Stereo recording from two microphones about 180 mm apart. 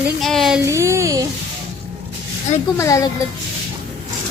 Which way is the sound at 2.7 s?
15° left (ahead or behind).